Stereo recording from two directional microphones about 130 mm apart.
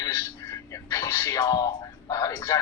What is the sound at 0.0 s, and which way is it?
A man's voice, 25° left (ahead or behind).